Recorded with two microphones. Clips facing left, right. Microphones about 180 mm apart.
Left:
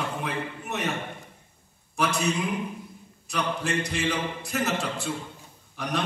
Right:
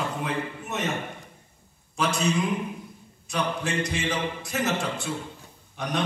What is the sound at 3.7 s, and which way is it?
A man's voice, 60° left (ahead or behind).